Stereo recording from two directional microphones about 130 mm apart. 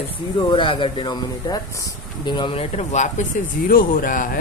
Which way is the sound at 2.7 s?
65° left (ahead or behind).